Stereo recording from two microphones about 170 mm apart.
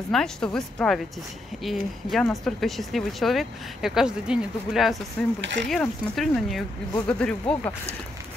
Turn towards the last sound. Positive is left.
turn(degrees=5)  # may be behind; listen again after turning